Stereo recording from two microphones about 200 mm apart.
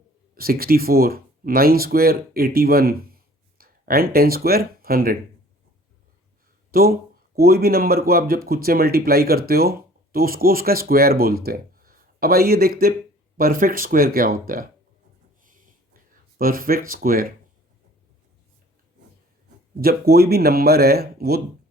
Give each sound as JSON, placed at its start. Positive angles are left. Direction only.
{"t": 0.3, "sound": "speech", "side_deg": -50}
{"t": 6.7, "sound": "speech", "side_deg": -50}
{"t": 16.4, "sound": "speech", "side_deg": -45}
{"t": 19.8, "sound": "speech", "side_deg": -50}